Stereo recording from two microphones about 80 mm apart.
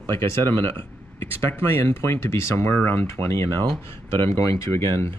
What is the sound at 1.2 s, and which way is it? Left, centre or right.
Speech, left.